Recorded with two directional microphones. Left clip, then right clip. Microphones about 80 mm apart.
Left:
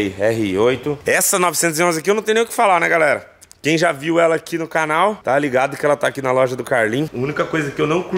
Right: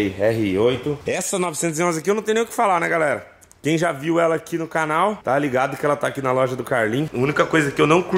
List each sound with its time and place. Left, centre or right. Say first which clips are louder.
0.0 s speech: left 2 dB; centre
1.0 s speech: left 10 dB; left; by 7.1 s centre
7.2 s speech: right 2 dB; centre